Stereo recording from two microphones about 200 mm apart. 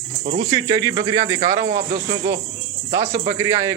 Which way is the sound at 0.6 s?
20° right (ahead or behind).